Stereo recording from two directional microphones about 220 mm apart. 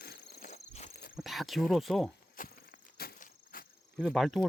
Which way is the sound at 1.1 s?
Centre (ahead or behind).